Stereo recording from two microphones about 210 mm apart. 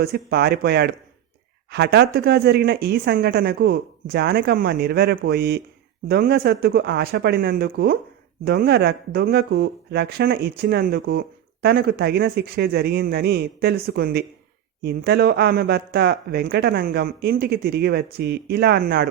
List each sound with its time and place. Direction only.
0.0 s speech: 50° right (ahead or behind)